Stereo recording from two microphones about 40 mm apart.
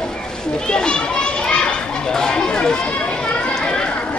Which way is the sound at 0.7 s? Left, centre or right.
Left.